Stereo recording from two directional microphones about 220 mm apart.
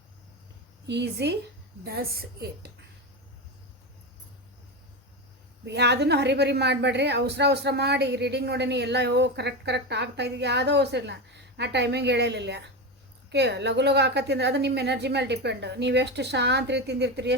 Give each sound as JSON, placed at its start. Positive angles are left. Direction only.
{"t": 0.9, "sound": "a woman's voice", "side_deg": -50}
{"t": 5.6, "sound": "a woman's voice", "side_deg": -50}